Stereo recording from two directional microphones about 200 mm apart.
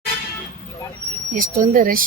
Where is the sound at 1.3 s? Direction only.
45° right (ahead or behind).